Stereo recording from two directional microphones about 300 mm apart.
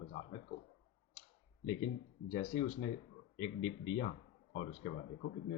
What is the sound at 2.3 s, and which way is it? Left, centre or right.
Speech, left.